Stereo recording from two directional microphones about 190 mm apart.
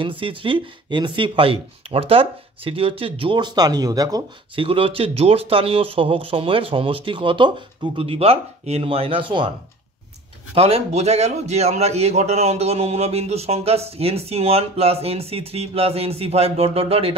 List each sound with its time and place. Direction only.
0.0 s speech: 25° right (ahead or behind)
10.5 s a man's voice: 30° right (ahead or behind)